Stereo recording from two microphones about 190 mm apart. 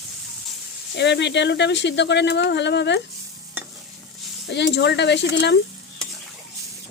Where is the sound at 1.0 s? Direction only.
65° left (ahead or behind).